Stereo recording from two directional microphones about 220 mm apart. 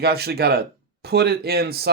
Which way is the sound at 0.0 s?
45° right (ahead or behind).